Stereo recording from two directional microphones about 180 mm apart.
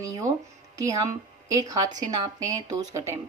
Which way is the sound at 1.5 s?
20° right (ahead or behind).